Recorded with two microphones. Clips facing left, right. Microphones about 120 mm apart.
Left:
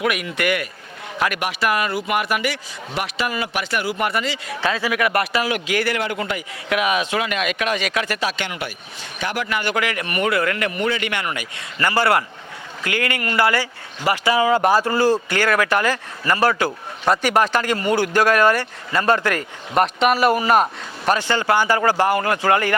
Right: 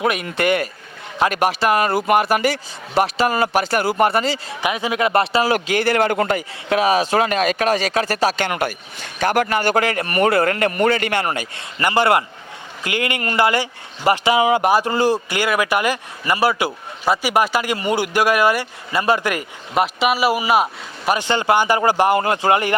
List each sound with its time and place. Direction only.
0.0 s speech: 30° right (ahead or behind)
1.9 s speech: 40° right (ahead or behind)
4.6 s speech: 20° right (ahead or behind)
6.0 s speech: 45° right (ahead or behind)
6.7 s speech: 35° right (ahead or behind)
11.8 s speech: 20° right (ahead or behind)
21.2 s speech: 20° right (ahead or behind)